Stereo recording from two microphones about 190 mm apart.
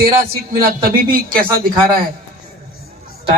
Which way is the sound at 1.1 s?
50° right (ahead or behind).